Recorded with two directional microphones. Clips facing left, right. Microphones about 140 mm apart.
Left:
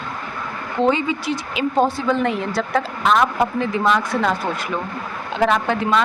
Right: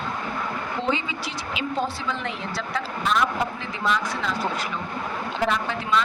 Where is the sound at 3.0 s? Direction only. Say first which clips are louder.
Left 6 dB; 90° left.